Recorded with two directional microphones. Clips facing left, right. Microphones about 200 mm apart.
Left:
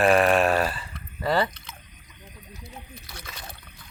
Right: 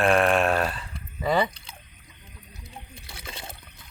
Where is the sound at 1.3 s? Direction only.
15° right (ahead or behind).